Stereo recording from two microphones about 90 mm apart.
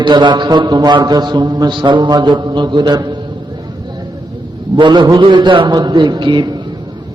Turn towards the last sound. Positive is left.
turn(degrees=-55)  # may be behind; listen again after turning